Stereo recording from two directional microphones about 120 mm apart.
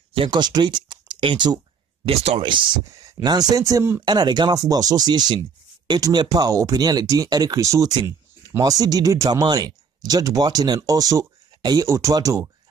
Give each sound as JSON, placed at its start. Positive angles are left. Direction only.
{"t": 0.1, "sound": "speech", "side_deg": -45}
{"t": 2.0, "sound": "speech", "side_deg": -55}
{"t": 2.9, "sound": "speech", "side_deg": -30}
{"t": 4.0, "sound": "speech", "side_deg": -35}